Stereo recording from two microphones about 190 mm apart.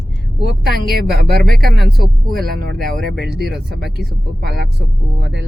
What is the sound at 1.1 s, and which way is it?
Speech, 55° right (ahead or behind).